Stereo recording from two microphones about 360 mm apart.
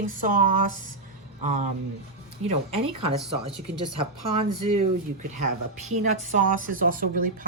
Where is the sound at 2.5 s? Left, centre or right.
Centre.